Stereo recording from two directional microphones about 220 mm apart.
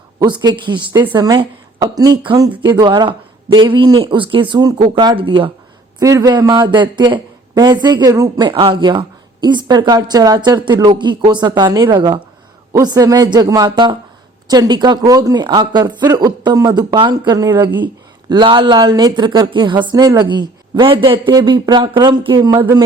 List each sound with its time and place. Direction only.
0.2 s a man's voice: 20° right (ahead or behind)